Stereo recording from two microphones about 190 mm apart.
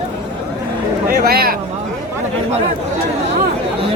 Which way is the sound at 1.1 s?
55° right (ahead or behind).